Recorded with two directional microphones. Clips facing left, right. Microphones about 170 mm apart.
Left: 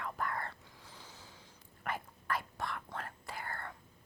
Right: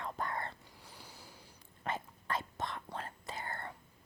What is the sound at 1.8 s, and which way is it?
Whispering, 25° right (ahead or behind).